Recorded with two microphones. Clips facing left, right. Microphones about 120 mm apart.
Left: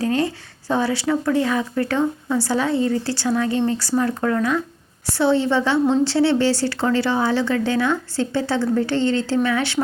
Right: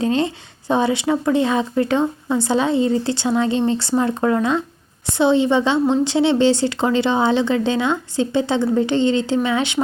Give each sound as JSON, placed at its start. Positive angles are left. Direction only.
{"t": 0.0, "sound": "speech", "side_deg": -20}